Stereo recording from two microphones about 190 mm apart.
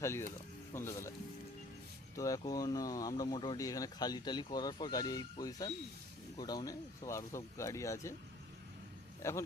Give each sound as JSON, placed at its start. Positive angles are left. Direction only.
{"t": 0.0, "sound": "speech", "side_deg": 15}
{"t": 2.1, "sound": "speech", "side_deg": 20}
{"t": 9.2, "sound": "speech", "side_deg": 15}